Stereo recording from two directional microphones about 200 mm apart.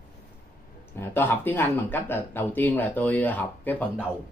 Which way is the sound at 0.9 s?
10° left (ahead or behind).